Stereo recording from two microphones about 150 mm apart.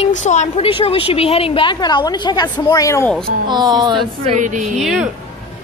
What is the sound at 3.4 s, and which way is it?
Speech, 30° right (ahead or behind).